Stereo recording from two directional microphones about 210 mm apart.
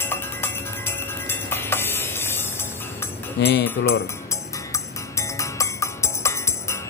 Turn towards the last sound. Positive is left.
turn(degrees=15)  # may be behind; listen again after turning